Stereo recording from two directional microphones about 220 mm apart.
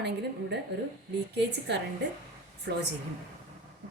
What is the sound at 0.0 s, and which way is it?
Speech, 50° right (ahead or behind).